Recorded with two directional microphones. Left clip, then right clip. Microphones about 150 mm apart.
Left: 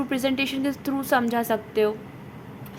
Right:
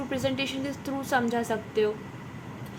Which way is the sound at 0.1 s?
35° left (ahead or behind).